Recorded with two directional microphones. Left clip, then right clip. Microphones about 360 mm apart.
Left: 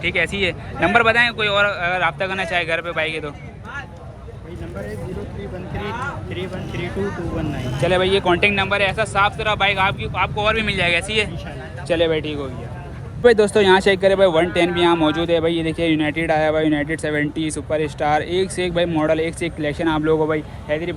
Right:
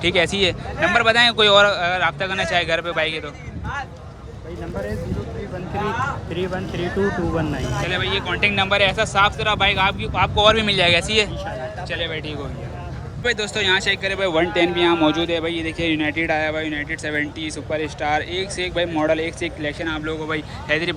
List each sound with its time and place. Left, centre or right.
0.0 s speech: centre
6.3 s speech: centre
7.9 s speech: centre
11.9 s speech: centre
14.3 s speech: left
16.6 s speech: centre